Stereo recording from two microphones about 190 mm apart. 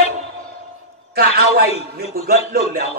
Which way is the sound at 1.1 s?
55° right (ahead or behind).